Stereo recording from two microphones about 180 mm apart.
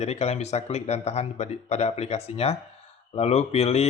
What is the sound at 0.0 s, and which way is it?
Speech, 35° left (ahead or behind).